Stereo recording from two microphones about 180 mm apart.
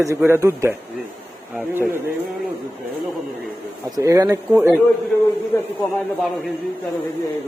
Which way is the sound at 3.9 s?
20° right (ahead or behind).